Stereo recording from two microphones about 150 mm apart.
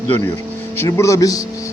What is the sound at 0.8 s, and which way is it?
Speech, 20° left (ahead or behind).